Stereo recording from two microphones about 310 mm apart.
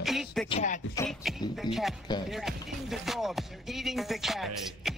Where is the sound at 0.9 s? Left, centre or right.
Centre.